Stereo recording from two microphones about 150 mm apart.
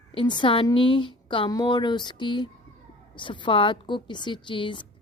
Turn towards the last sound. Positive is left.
turn(degrees=35)  # may be behind; listen again after turning